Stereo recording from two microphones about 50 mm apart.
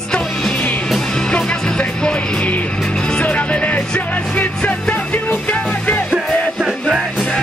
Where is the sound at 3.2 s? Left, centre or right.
Left.